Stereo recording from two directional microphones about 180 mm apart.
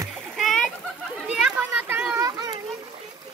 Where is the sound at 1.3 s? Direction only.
10° right (ahead or behind).